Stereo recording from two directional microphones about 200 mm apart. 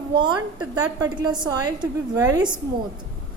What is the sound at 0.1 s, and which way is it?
A woman's voice, 25° right (ahead or behind).